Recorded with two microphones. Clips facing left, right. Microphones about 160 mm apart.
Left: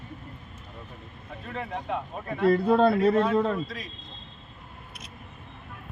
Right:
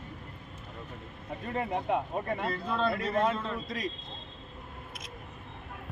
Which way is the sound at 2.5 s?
60° left (ahead or behind).